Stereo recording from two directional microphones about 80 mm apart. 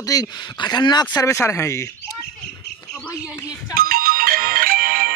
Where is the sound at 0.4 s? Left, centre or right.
Left.